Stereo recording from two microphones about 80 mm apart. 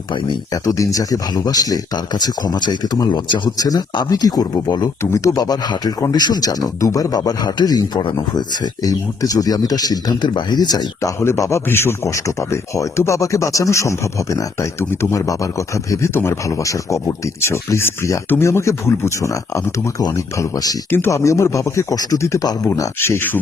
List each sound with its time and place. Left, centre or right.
0.1 s speech: left
0.5 s speech: left
3.6 s speech: left
5.1 s speech: left
11.0 s speech: left
23.0 s speech: left